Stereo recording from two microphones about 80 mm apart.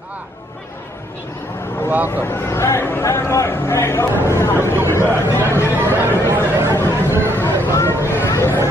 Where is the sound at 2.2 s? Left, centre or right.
Left.